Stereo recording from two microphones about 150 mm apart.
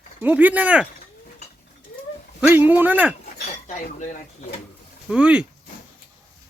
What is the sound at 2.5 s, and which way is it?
Speech, 15° right (ahead or behind).